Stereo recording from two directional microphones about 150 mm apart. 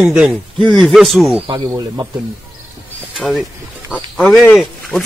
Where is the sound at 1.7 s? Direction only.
20° right (ahead or behind).